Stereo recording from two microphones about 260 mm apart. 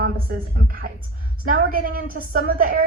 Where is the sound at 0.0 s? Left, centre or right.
Right.